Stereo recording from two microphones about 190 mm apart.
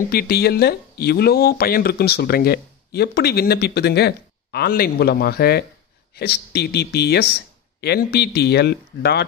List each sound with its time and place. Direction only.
0.1 s speech: 55° left (ahead or behind)